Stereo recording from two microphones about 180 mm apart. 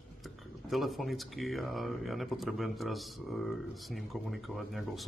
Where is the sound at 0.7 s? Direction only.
Centre (ahead or behind).